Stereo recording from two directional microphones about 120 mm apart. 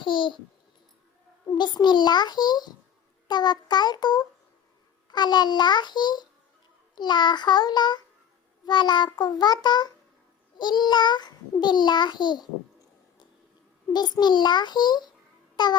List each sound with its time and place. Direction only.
0.0 s a child's voice: 40° left (ahead or behind)
1.5 s a child's voice: 40° left (ahead or behind)
13.9 s a child's voice: 35° left (ahead or behind)